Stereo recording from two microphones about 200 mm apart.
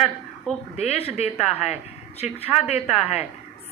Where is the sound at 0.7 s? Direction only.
30° left (ahead or behind).